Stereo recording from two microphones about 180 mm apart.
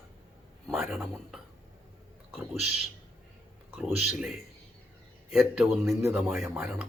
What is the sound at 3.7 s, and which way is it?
Speech, centre (ahead or behind).